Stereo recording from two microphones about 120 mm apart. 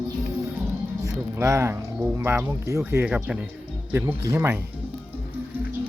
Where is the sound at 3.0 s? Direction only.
10° right (ahead or behind).